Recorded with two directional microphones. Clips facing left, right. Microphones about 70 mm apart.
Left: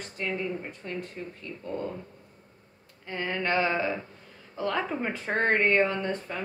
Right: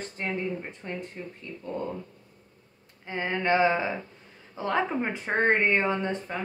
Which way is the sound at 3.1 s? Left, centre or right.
Centre.